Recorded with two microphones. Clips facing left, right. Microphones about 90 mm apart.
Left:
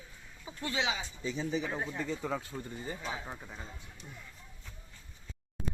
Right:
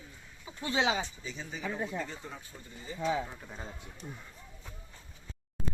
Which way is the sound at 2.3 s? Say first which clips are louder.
Left 11 dB; 85° left.